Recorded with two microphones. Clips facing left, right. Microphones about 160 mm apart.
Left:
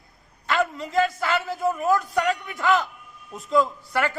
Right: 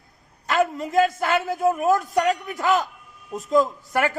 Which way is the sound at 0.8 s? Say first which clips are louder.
Right 3 dB; 50° right (ahead or behind).